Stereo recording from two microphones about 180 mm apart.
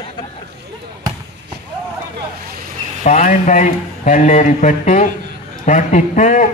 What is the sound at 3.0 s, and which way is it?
A man's voice, 45° left (ahead or behind).